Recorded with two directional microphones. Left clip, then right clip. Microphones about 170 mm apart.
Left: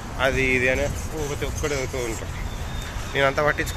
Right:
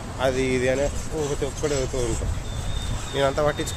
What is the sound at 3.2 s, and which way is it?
Speech, 5° right (ahead or behind).